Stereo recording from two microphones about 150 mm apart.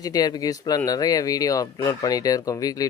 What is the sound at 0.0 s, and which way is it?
Speech, 25° left (ahead or behind).